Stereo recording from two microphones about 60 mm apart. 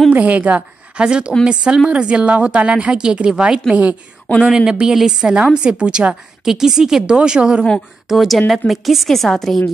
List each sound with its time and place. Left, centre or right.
0.1 s a woman's voice: right
8.1 s a woman's voice: centre